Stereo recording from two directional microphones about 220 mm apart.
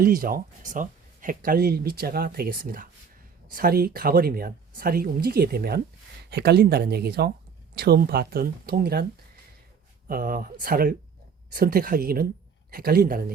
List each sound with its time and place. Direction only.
0.0 s speech: 40° right (ahead or behind)
10.1 s speech: 40° right (ahead or behind)